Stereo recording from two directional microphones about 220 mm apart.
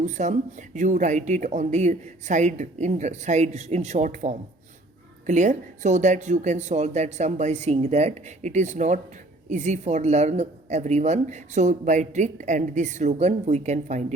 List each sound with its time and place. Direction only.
0.0 s speech: 35° right (ahead or behind)